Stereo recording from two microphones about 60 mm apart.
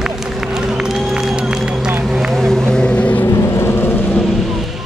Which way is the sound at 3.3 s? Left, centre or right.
Left.